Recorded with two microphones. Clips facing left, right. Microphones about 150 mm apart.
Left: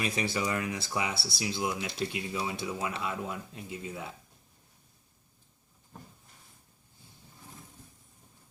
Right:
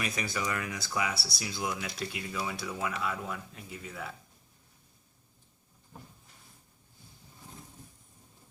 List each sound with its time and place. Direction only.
0.0 s speech: 30° left (ahead or behind)